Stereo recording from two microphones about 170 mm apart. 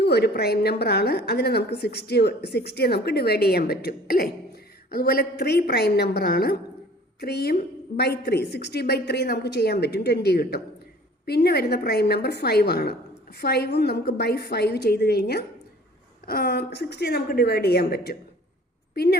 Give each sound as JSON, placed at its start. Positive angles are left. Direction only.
{"t": 0.0, "sound": "a woman's voice", "side_deg": 75}